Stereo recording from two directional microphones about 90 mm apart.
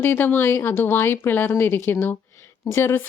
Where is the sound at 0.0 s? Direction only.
20° left (ahead or behind).